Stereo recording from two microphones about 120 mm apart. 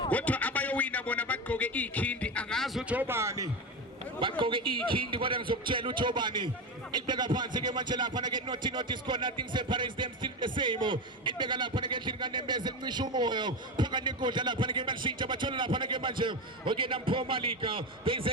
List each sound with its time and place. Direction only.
0.1 s a sound: 10° left (ahead or behind)
2.9 s speech: 15° right (ahead or behind)
4.2 s a man's voice: 45° right (ahead or behind)